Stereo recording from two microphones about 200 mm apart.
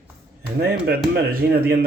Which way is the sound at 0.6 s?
55° right (ahead or behind).